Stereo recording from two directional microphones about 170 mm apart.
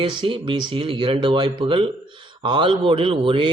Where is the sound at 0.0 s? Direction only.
30° right (ahead or behind).